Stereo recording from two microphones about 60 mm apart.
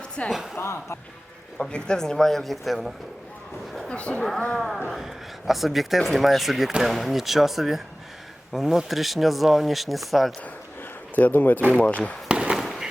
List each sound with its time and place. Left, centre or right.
0.3 s speech: centre
0.5 s a man's voice: left
1.5 s speech: centre
3.8 s speech: centre
4.2 s speech: centre
11.1 s speech: left
12.3 s fireworks: centre